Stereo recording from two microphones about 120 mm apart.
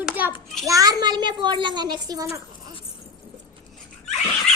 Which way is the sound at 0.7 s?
30° right (ahead or behind).